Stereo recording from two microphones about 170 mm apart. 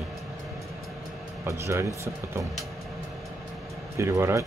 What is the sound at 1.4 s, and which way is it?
Speech, 15° right (ahead or behind).